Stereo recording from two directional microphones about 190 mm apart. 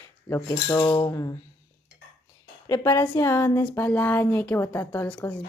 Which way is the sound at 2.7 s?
15° left (ahead or behind).